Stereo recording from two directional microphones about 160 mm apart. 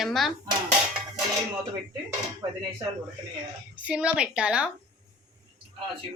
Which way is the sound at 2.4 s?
25° right (ahead or behind).